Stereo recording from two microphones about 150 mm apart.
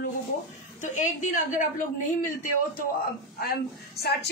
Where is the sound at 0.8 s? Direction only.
55° left (ahead or behind).